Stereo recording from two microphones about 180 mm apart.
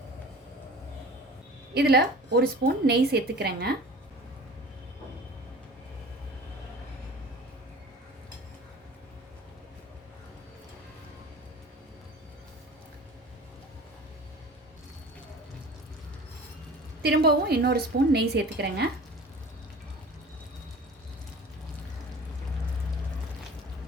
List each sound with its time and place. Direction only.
1.7 s a woman's voice: 60° right (ahead or behind)
17.0 s a woman's voice: 65° right (ahead or behind)